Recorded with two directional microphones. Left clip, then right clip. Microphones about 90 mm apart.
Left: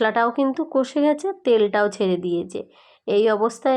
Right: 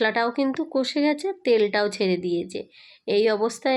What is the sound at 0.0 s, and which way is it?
A woman's voice, 25° left (ahead or behind).